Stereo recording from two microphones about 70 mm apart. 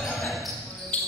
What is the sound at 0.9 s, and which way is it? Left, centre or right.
Cricket, left.